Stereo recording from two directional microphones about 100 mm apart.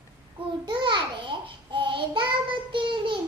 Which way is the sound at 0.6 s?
50° right (ahead or behind).